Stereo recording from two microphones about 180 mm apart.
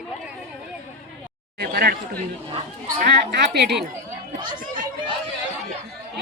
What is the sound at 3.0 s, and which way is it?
Speech, 65° right (ahead or behind).